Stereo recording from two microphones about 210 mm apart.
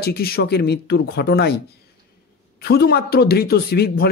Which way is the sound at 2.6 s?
50° left (ahead or behind).